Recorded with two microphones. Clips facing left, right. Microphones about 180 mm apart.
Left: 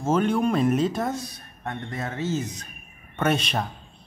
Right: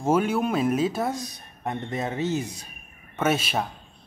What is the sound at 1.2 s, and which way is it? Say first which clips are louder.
A man's voice: right 3 dB; 15° right (ahead or behind).